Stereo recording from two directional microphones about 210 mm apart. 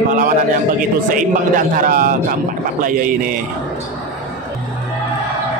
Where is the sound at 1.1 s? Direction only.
40° right (ahead or behind).